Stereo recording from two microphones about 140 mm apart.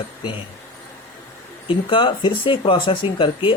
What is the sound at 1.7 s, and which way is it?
Speech, 35° left (ahead or behind).